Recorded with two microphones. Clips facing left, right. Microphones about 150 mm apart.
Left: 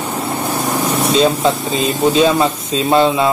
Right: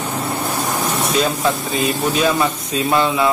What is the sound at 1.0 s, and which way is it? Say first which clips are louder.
Speech: left 6 dB; 25° left (ahead or behind).